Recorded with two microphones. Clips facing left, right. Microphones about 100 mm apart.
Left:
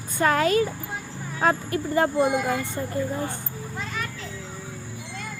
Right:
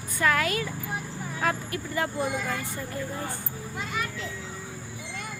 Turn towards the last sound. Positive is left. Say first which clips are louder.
# even
turn(degrees=-10)  # may be behind; listen again after turning